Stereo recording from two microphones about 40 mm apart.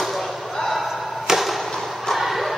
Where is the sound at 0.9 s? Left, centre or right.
Centre.